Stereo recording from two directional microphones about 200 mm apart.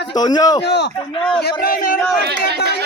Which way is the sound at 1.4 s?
50° left (ahead or behind).